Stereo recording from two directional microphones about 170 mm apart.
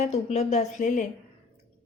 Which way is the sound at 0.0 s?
40° left (ahead or behind).